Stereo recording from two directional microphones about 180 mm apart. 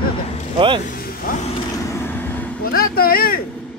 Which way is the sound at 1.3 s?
50° left (ahead or behind).